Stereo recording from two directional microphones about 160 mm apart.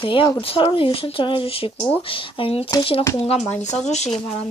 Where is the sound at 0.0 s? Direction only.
30° left (ahead or behind).